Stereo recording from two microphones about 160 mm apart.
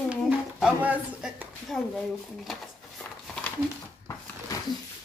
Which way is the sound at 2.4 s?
5° left (ahead or behind).